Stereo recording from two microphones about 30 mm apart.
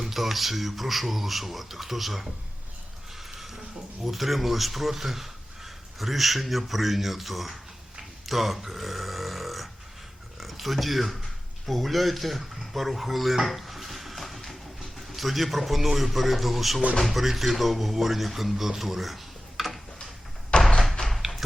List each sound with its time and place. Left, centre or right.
0.0 s speech: centre
3.3 s a sound: centre
4.0 s speech: centre
13.6 s a sound: centre
15.1 s speech: centre
20.5 s door: left